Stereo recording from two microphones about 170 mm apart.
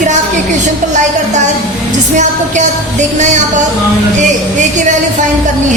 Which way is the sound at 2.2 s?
45° right (ahead or behind).